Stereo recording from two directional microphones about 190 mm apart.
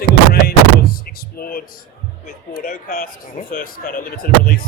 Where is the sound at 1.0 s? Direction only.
50° left (ahead or behind).